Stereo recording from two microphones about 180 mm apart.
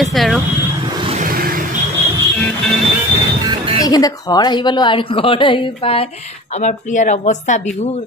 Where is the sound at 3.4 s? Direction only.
30° right (ahead or behind).